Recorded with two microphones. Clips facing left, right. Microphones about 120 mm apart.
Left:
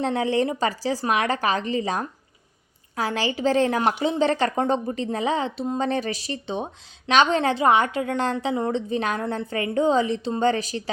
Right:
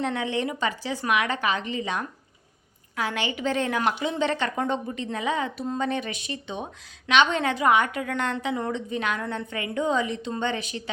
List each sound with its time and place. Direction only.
0.0 s a woman's voice: 35° left (ahead or behind)